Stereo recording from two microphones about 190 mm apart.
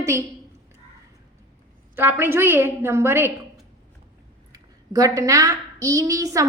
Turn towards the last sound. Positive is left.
turn(degrees=-15)  # may be behind; listen again after turning